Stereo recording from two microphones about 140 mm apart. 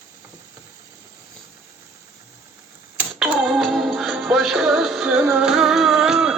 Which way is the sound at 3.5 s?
Centre (ahead or behind).